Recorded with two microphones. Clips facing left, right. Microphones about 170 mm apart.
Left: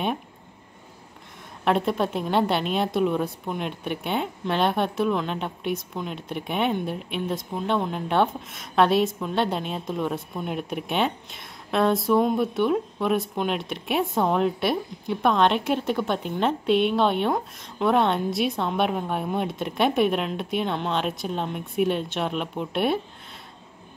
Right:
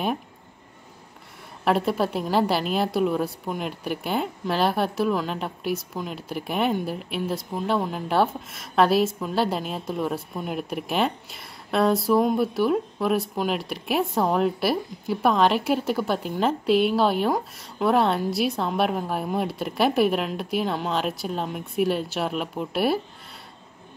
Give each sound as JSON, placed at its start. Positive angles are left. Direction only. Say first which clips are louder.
{"t": 1.6, "sound": "a woman's voice", "louder": "even", "side_deg": 0}